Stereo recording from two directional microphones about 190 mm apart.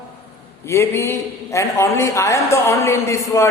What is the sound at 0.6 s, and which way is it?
A man's voice, 15° left (ahead or behind).